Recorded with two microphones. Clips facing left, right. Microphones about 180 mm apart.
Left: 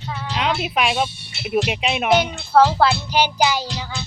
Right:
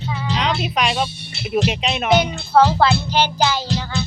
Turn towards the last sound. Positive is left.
turn(degrees=10)  # may be behind; listen again after turning